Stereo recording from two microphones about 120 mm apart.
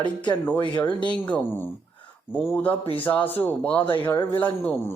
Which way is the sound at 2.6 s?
50° left (ahead or behind).